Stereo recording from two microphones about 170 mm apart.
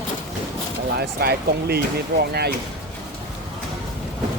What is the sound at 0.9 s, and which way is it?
Speech, 70° right (ahead or behind).